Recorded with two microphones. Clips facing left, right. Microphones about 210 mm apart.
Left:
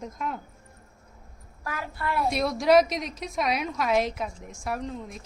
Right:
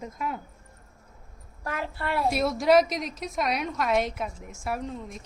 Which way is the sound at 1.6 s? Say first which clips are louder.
Right 1 dB; 30° right (ahead or behind).